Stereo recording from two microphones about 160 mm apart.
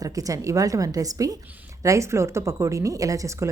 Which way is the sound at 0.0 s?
20° right (ahead or behind).